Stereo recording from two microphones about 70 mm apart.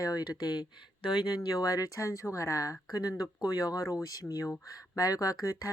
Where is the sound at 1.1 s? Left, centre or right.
Left.